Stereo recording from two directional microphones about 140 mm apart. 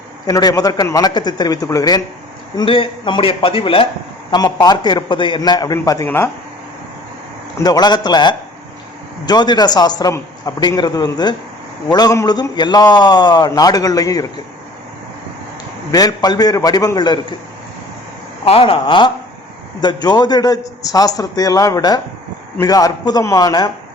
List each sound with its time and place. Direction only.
0.3 s a man's voice: 25° left (ahead or behind)
2.6 s a man's voice: 40° left (ahead or behind)
4.3 s a man's voice: 30° left (ahead or behind)
7.6 s a man's voice: 30° left (ahead or behind)
15.9 s a man's voice: 25° left (ahead or behind)
18.4 s a man's voice: 40° left (ahead or behind)